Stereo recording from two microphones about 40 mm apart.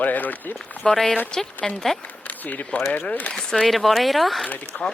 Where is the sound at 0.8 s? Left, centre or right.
Centre.